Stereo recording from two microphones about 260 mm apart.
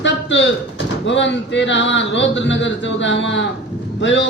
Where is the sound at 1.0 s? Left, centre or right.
Left.